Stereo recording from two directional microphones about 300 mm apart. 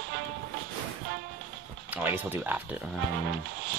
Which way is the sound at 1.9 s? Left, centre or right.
Centre.